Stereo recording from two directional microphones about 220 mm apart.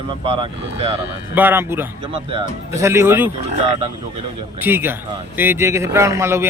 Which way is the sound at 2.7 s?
10° right (ahead or behind).